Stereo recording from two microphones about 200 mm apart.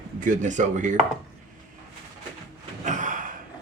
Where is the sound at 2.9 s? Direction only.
40° right (ahead or behind).